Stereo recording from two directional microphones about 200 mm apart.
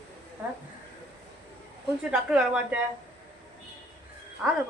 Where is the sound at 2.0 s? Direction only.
5° right (ahead or behind).